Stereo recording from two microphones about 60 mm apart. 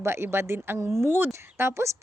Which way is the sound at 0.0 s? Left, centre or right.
Right.